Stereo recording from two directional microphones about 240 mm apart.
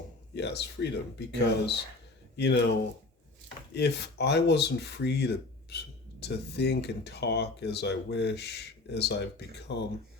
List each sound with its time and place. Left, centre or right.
0.3 s speech: left
3.8 s speech: left